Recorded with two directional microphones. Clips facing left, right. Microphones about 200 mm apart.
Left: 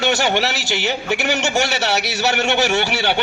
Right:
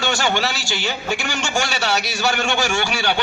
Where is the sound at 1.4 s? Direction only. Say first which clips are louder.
Left 3 dB; 20° left (ahead or behind).